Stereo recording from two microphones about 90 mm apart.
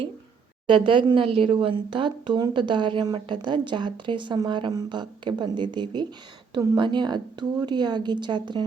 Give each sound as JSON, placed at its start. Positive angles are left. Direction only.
{"t": 0.7, "sound": "a woman's voice", "side_deg": -70}